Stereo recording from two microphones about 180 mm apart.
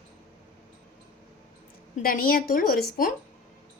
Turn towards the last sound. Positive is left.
turn(degrees=50)  # may be behind; listen again after turning